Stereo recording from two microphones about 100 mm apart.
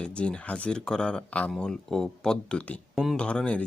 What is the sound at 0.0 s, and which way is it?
Speech, 10° left (ahead or behind).